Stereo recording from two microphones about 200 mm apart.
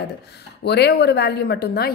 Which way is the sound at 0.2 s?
55° left (ahead or behind).